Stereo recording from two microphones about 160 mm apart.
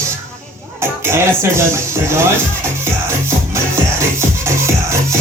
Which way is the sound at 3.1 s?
15° right (ahead or behind).